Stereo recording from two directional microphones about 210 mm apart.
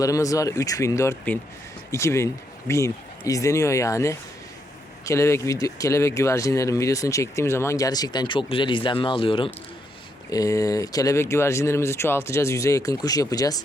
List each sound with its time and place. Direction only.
0.0 s speech: 15° left (ahead or behind)